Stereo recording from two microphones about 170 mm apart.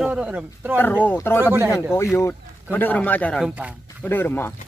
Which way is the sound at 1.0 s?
15° left (ahead or behind).